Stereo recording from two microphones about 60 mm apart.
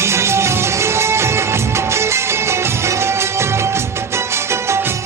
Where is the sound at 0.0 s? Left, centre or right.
Right.